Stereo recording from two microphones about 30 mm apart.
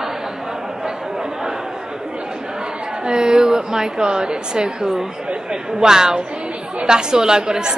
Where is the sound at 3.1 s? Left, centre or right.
Right.